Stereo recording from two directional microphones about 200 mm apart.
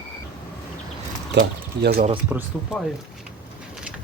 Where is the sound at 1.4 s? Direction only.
55° right (ahead or behind).